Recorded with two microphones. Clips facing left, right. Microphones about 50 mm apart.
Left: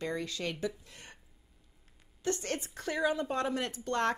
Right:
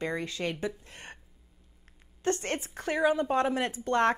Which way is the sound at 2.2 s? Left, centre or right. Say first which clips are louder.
Right 4 dB; right.